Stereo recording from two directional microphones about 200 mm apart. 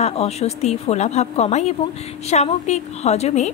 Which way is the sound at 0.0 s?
30° left (ahead or behind).